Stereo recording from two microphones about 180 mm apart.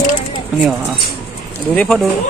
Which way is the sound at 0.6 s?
5° right (ahead or behind).